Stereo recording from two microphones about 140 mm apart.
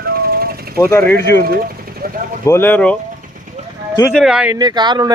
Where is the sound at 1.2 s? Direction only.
90° right.